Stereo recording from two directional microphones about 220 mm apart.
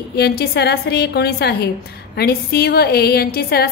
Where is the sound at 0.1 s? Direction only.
45° left (ahead or behind).